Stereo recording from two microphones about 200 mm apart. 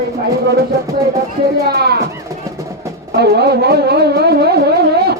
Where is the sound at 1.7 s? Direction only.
55° right (ahead or behind).